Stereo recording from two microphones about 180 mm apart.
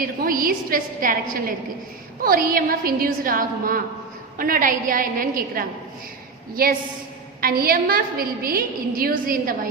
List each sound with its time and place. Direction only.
0.0 s a woman's voice: 50° right (ahead or behind)